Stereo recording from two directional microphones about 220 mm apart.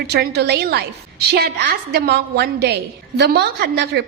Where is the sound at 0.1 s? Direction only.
45° right (ahead or behind).